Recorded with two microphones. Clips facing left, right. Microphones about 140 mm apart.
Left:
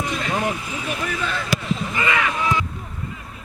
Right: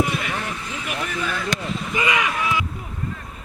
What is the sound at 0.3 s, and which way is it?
Vehicle, 15° left (ahead or behind).